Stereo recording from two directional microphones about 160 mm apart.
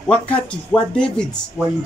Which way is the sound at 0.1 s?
5° left (ahead or behind).